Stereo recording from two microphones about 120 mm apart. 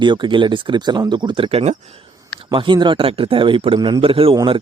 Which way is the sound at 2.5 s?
40° right (ahead or behind).